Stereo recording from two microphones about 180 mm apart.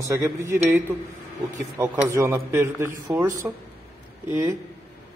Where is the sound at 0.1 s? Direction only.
15° right (ahead or behind).